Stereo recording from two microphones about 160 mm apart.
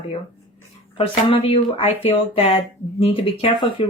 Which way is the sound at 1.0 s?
35° left (ahead or behind).